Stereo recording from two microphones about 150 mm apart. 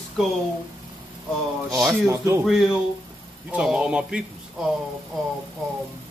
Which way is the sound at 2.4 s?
Centre (ahead or behind).